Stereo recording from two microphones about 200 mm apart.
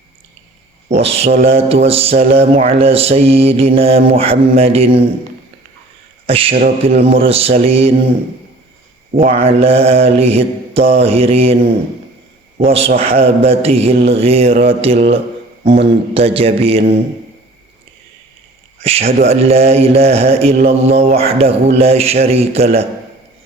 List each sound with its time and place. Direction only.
0.9 s mantra: 30° right (ahead or behind)
6.2 s a man's voice: 30° right (ahead or behind)
6.8 s mantra: 30° right (ahead or behind)
9.1 s mantra: 30° right (ahead or behind)
12.6 s mantra: 30° right (ahead or behind)
18.8 s a man's voice: 30° right (ahead or behind)